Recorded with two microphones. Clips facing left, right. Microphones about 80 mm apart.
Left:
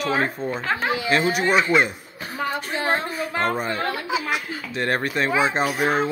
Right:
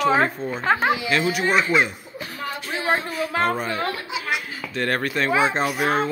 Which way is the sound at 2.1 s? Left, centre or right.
Left.